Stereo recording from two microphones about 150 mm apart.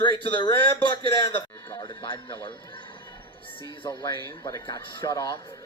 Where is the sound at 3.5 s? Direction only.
30° left (ahead or behind).